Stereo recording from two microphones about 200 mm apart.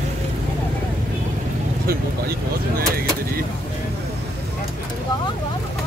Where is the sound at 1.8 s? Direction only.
50° right (ahead or behind).